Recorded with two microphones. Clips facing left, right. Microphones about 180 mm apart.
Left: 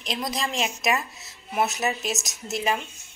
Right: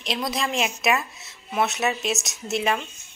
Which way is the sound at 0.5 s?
35° left (ahead or behind).